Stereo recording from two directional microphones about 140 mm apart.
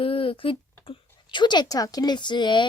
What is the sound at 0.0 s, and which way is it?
Speech, 40° left (ahead or behind).